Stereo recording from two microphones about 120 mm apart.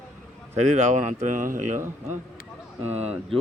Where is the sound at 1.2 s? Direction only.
90° right.